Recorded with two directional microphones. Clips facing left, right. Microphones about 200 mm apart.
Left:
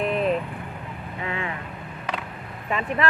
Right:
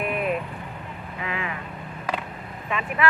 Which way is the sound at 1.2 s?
30° left (ahead or behind).